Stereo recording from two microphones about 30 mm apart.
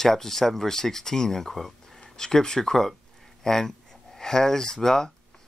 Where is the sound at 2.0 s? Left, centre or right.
Left.